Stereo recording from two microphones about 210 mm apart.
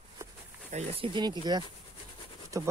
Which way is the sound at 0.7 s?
25° right (ahead or behind).